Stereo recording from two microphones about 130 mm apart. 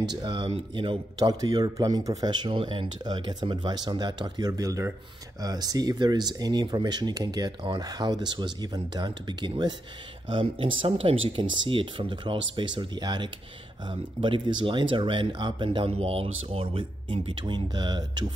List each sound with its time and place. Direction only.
0.2 s a man's voice: 35° right (ahead or behind)